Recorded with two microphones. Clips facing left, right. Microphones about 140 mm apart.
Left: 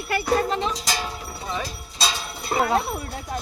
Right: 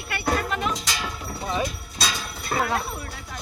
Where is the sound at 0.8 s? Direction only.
35° left (ahead or behind).